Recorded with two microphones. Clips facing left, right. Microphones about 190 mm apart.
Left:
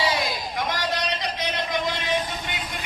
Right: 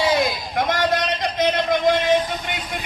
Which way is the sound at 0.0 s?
50° right (ahead or behind).